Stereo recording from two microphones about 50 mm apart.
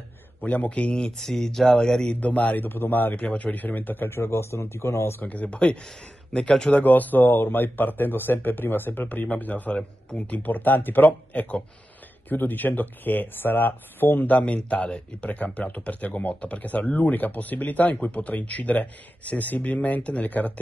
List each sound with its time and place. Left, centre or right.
0.5 s speech: left
2.1 s speech: left
2.6 s speech: left
3.2 s speech: left
3.5 s speech: left
4.1 s speech: left
5.2 s speech: left
6.7 s speech: left
14.4 s speech: left